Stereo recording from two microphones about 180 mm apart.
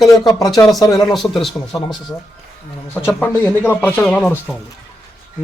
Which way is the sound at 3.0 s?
10° left (ahead or behind).